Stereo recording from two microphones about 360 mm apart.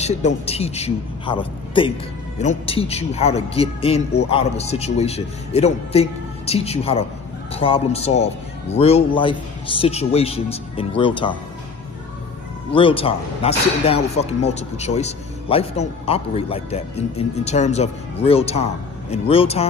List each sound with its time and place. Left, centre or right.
0.0 s a man's voice: centre
12.7 s a man's voice: centre